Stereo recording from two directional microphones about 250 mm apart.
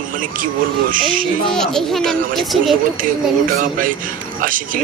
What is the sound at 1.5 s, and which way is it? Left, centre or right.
A child's voice, centre.